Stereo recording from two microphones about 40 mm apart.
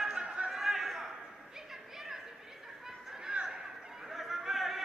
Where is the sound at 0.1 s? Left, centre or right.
Right.